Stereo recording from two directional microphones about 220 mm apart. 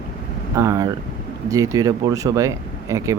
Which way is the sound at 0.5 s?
15° right (ahead or behind).